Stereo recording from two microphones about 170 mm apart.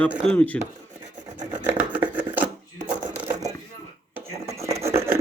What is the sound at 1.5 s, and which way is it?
Filing, 10° right (ahead or behind).